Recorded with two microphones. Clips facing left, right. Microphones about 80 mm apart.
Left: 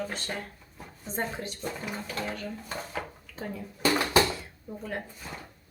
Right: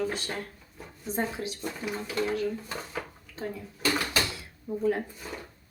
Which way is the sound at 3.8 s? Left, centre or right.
Left.